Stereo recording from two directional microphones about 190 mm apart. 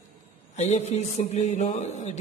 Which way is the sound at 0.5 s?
35° left (ahead or behind).